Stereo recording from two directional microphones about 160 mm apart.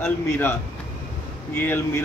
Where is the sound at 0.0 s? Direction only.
15° left (ahead or behind).